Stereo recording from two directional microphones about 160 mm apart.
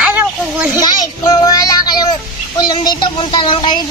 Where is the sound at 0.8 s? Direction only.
25° left (ahead or behind).